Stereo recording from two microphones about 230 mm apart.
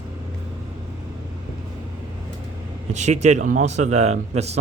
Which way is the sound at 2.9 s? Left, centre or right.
Right.